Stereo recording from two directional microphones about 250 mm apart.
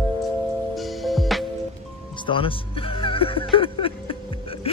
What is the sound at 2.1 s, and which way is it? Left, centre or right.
Music, centre.